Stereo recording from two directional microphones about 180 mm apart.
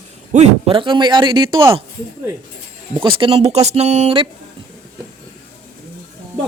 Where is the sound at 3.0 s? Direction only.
30° right (ahead or behind).